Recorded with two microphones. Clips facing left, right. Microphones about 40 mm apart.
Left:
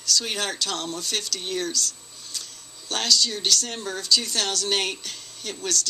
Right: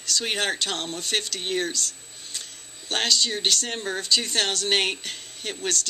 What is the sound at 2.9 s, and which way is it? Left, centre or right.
Speech, right.